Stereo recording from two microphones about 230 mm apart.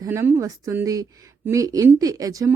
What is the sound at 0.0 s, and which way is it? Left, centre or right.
A woman's voice, centre.